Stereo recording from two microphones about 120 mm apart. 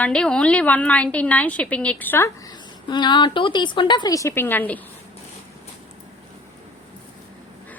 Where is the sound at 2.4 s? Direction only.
40° left (ahead or behind); by 4.7 s 15° left (ahead or behind).